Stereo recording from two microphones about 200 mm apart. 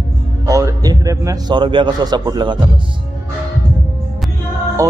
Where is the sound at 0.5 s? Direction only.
15° right (ahead or behind).